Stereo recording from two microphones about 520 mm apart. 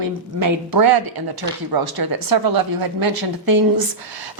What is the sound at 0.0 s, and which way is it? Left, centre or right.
A woman's voice, right.